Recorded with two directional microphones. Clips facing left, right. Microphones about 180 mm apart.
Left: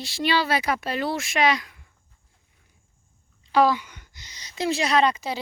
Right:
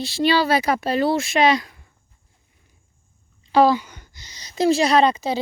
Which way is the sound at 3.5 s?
30° right (ahead or behind).